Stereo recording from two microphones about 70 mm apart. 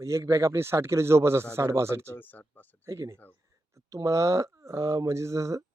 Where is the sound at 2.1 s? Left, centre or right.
Left.